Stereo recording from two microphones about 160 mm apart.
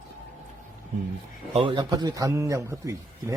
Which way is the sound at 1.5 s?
30° right (ahead or behind).